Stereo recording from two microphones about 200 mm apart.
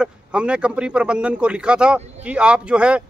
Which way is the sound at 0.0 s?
5° right (ahead or behind).